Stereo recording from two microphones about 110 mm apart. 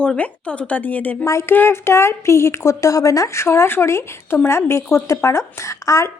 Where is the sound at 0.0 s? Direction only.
10° left (ahead or behind).